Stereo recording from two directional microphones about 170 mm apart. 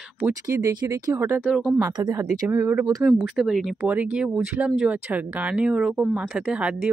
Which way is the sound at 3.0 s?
Centre (ahead or behind).